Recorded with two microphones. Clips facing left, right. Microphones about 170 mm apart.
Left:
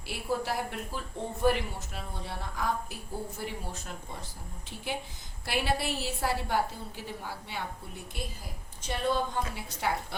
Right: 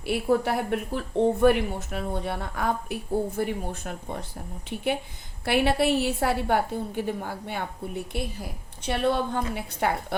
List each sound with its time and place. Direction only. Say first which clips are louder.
0.0 s speech: right 9 dB; 60° right (ahead or behind)
8.8 s speech: right 5 dB; 65° right (ahead or behind)